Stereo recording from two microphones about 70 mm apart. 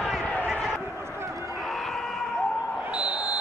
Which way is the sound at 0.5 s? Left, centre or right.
Centre.